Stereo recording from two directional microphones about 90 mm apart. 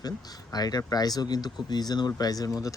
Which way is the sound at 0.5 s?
45° left (ahead or behind).